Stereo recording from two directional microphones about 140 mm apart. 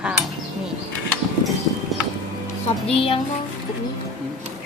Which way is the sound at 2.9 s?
40° left (ahead or behind).